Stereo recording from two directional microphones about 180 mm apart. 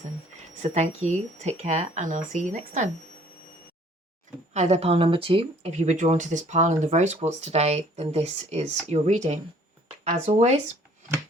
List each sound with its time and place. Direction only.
0.6 s speech: 40° right (ahead or behind)
4.5 s speech: 40° right (ahead or behind)